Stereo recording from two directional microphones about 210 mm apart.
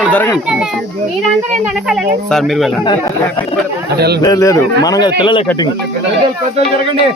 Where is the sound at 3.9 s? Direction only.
50° right (ahead or behind).